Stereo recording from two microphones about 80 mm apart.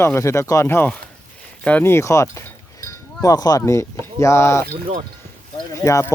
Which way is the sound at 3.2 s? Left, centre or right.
Left.